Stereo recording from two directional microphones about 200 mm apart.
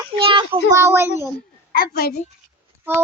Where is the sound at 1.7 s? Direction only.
50° left (ahead or behind).